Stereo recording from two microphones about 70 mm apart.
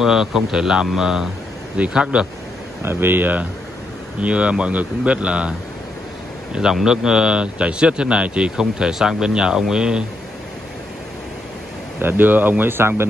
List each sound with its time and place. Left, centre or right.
0.0 s speech: centre
2.8 s speech: right; by 5.5 s centre
6.5 s speech: centre
12.0 s speech: right